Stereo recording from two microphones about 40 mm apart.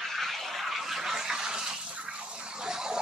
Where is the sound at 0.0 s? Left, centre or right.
Centre.